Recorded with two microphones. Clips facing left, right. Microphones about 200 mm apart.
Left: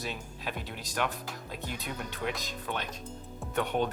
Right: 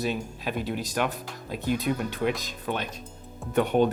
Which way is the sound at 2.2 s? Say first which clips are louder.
Right 6 dB; 10° right (ahead or behind).